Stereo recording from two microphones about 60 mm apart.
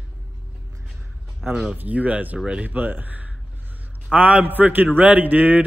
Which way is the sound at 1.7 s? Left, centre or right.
Right.